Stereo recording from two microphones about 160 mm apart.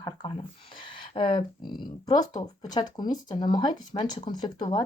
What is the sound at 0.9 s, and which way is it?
Speech, 30° left (ahead or behind).